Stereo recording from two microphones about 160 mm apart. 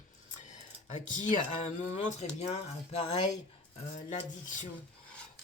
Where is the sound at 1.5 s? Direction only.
45° left (ahead or behind).